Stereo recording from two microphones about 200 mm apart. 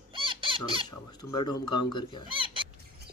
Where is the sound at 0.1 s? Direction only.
25° right (ahead or behind).